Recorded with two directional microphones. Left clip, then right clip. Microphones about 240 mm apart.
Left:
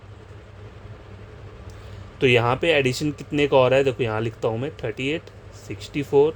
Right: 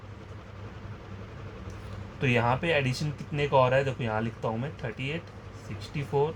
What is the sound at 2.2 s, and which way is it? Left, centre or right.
Speech, left.